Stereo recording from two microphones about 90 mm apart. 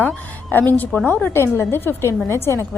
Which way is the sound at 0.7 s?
20° left (ahead or behind).